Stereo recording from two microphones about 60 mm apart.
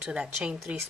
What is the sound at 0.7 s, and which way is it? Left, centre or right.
Speech, right.